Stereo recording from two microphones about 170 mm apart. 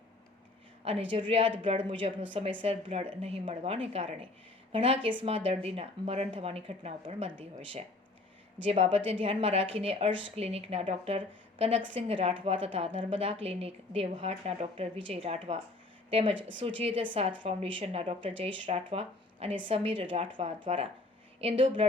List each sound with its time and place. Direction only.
1.1 s speech: 30° right (ahead or behind)
10.1 s speech: 90° right
10.3 s a woman's voice: 35° right (ahead or behind)
16.4 s speech: 90° right
16.6 s speech: 30° right (ahead or behind)